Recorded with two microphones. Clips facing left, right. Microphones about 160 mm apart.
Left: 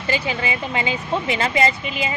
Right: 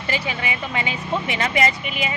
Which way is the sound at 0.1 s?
30° left (ahead or behind).